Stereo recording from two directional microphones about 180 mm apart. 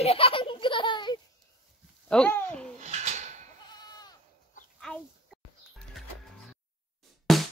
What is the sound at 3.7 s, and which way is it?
Goat, 20° left (ahead or behind).